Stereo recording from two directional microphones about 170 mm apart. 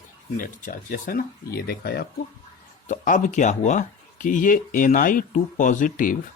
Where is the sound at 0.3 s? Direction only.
55° left (ahead or behind).